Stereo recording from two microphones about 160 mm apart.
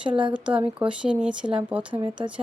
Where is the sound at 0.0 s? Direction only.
30° right (ahead or behind).